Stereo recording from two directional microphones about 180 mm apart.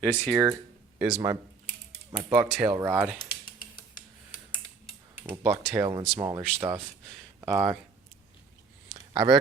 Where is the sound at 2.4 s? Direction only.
5° right (ahead or behind).